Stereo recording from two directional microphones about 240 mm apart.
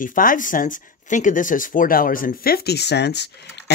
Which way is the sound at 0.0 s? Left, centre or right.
Left.